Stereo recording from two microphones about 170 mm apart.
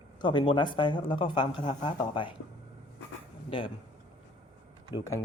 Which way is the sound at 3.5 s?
30° left (ahead or behind).